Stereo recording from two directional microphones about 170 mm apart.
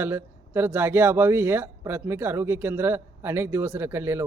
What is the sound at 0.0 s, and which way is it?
A man's voice, 15° right (ahead or behind).